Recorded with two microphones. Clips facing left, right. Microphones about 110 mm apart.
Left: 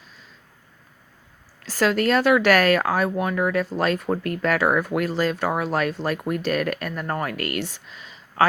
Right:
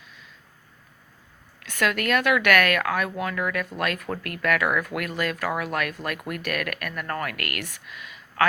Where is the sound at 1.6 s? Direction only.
30° left (ahead or behind).